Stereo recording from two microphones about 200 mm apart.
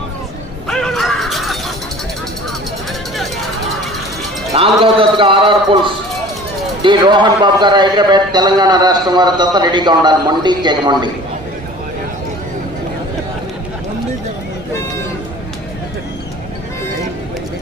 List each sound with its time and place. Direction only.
0.7 s shatter: centre (ahead or behind)
4.5 s a man's voice: 30° right (ahead or behind)